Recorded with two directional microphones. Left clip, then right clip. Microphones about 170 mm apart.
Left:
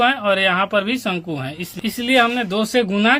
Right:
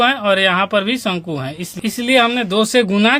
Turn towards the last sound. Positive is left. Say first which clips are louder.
# right 3 dB
turn(degrees=-30)  # may be behind; listen again after turning